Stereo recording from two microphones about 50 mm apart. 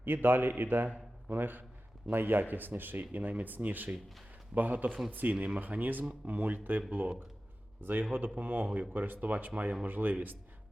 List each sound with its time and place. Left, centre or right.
0.0 s a man's voice: right